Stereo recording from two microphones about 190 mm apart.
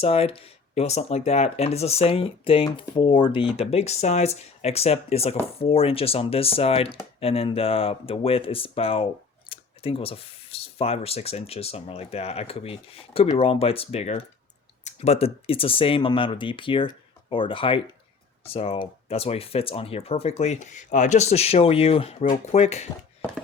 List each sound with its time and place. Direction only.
0.0 s speech: 30° left (ahead or behind)